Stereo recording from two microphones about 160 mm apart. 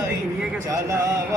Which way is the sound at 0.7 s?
20° right (ahead or behind).